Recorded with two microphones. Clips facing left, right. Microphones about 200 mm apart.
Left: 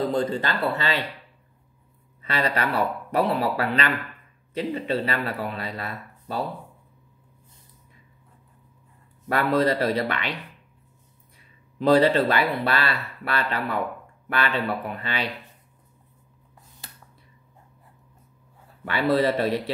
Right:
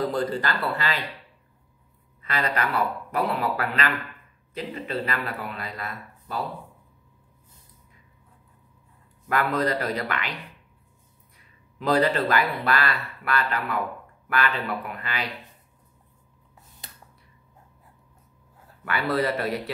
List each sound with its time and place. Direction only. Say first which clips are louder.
0.1 s speech: left 2 dB; 25° left (ahead or behind)
2.2 s speech: left 2 dB; 30° left (ahead or behind)
9.3 s speech: left 3 dB; 30° left (ahead or behind)
11.8 s speech: left 4 dB; 25° left (ahead or behind)
18.9 s speech: left 4 dB; 25° left (ahead or behind)